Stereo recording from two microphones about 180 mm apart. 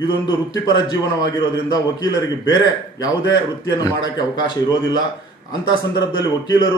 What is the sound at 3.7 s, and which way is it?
A man's voice, 20° left (ahead or behind).